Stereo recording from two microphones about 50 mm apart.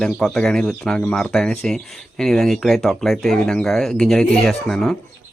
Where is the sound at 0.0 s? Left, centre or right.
Centre.